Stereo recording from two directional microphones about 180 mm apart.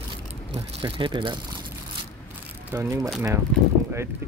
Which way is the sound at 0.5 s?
30° right (ahead or behind).